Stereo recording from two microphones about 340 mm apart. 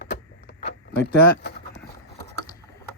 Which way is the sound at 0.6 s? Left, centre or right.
Left.